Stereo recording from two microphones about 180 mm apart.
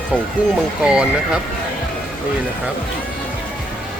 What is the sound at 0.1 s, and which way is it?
Speech, centre (ahead or behind).